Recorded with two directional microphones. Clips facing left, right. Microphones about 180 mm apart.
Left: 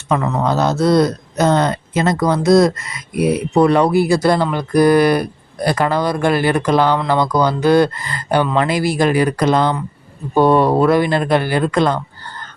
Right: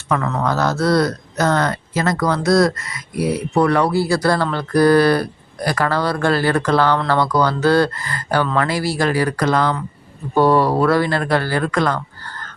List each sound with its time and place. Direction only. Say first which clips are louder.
0.1 s speech: left 3 dB; 20° left (ahead or behind)